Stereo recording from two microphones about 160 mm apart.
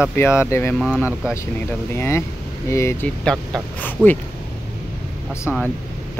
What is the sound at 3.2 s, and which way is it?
Speech, 5° left (ahead or behind).